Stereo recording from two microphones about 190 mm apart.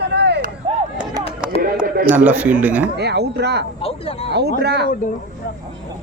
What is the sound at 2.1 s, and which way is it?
Speech, 10° right (ahead or behind).